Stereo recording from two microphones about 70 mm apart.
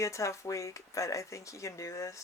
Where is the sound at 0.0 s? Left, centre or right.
Left.